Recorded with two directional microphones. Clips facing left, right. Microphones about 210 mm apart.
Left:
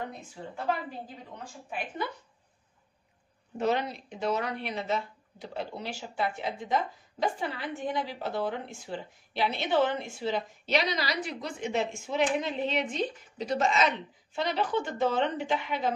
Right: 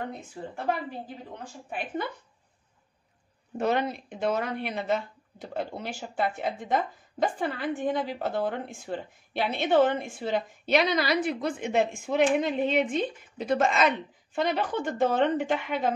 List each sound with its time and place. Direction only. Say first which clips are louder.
3.5 s a woman's voice: right 2 dB; 55° right (ahead or behind)